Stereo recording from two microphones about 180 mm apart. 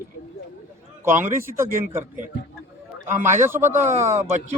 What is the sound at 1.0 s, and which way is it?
Speech, 10° right (ahead or behind).